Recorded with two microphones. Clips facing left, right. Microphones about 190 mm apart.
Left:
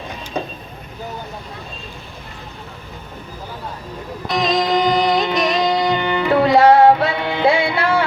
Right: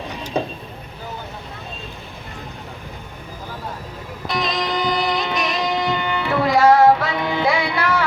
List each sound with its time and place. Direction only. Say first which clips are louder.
4.4 s music: left 6 dB; 45° left (ahead or behind)